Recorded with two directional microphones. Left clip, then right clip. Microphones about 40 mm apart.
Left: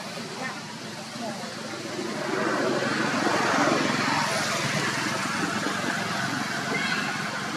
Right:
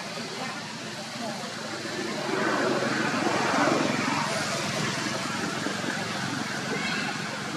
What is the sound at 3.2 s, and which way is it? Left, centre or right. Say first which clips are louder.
Vehicle: left 2 dB; centre.